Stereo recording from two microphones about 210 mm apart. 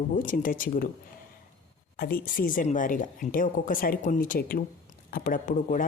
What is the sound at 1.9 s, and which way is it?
Speech, 45° left (ahead or behind).